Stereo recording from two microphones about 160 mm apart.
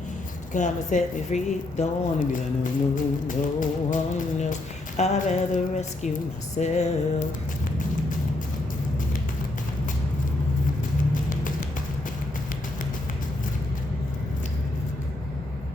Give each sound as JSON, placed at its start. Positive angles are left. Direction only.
{"t": 0.5, "sound": "a woman's voice", "side_deg": 50}
{"t": 2.9, "sound": "music", "side_deg": 55}
{"t": 4.9, "sound": "a woman's voice", "side_deg": 45}